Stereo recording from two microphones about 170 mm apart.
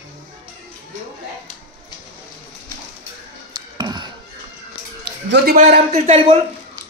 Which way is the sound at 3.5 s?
25° right (ahead or behind).